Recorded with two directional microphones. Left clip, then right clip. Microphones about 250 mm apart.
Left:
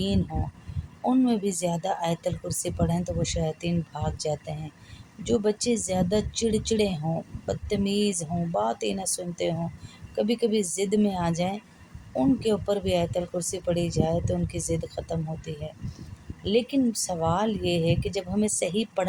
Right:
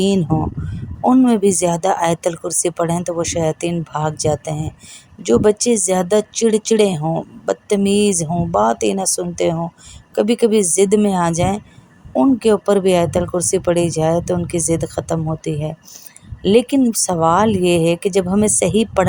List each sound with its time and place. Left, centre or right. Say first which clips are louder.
1.0 s a woman's voice: right 11 dB; right